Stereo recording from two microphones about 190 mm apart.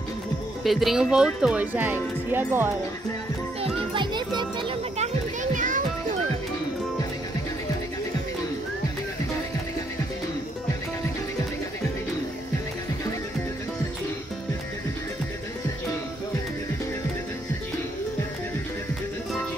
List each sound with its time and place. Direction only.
0.7 s speech: centre (ahead or behind)
3.6 s children playing: 25° right (ahead or behind)
4.9 s children playing: 40° right (ahead or behind)